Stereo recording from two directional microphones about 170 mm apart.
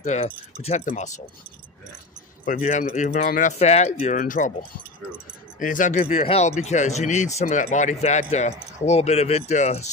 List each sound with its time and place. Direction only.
0.0 s speech: 40° left (ahead or behind)
2.4 s speech: 50° left (ahead or behind)
5.6 s speech: 50° left (ahead or behind)
6.2 s speech: 35° left (ahead or behind)